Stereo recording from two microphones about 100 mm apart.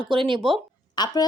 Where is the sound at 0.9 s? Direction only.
45° left (ahead or behind).